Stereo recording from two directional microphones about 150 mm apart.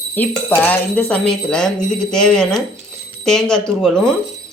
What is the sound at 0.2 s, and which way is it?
Speech, 10° left (ahead or behind).